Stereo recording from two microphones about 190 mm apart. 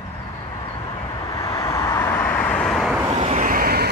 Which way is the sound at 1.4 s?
15° left (ahead or behind).